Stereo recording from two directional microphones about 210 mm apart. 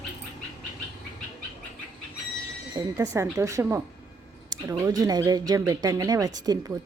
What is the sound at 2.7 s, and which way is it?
Speech, 15° right (ahead or behind).